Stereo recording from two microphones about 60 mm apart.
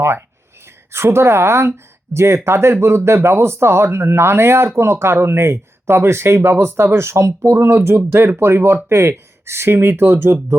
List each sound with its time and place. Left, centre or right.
0.9 s speech: right